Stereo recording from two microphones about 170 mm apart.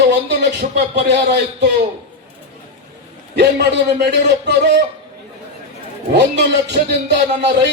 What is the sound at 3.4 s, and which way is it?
A man's voice, 75° right (ahead or behind).